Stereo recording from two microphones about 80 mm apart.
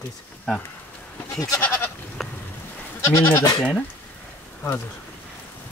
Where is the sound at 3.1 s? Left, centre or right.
Left.